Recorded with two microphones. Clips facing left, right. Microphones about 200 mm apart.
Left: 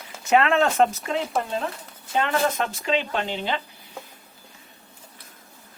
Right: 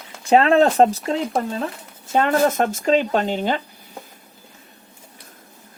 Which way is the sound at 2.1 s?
45° right (ahead or behind).